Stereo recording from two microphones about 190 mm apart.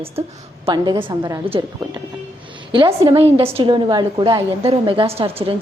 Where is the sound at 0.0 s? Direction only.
30° right (ahead or behind).